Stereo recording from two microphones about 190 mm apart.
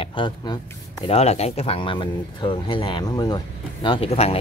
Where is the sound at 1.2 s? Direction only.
35° left (ahead or behind).